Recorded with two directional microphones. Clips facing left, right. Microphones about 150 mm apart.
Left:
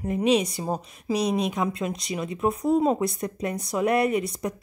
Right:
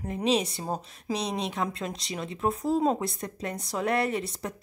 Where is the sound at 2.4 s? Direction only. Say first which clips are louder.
Left 3 dB; 15° left (ahead or behind).